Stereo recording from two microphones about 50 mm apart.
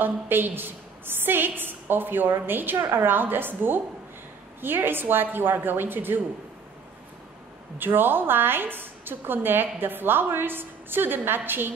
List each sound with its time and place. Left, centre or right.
0.0 s a woman's voice: right
7.8 s a woman's voice: right